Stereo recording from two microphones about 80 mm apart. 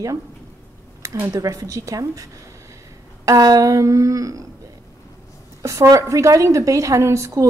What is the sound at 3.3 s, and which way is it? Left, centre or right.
A woman's voice, right.